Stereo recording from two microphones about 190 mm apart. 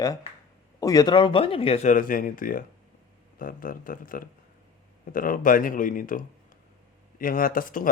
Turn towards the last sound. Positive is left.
turn(degrees=45)  # may be behind; listen again after turning